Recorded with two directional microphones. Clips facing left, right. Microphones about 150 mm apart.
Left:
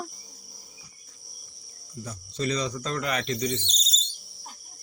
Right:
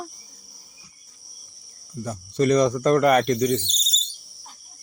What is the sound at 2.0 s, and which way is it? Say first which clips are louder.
Speech: right 9 dB; 55° right (ahead or behind).